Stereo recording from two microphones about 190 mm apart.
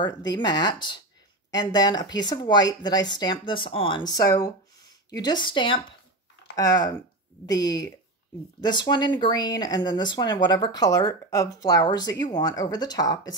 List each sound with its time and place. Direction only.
0.0 s speech: 20° left (ahead or behind)